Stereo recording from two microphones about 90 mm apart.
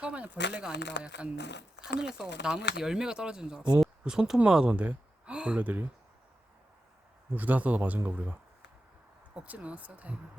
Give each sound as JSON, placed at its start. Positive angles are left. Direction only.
{"t": 0.0, "sound": "speech", "side_deg": -10}
{"t": 7.3, "sound": "speech", "side_deg": -20}